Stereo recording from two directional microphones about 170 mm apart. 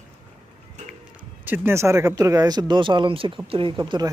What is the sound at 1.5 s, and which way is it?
Speech, 15° right (ahead or behind).